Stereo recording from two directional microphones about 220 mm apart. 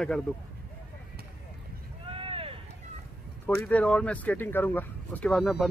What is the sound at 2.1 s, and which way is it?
Vehicle, 25° right (ahead or behind).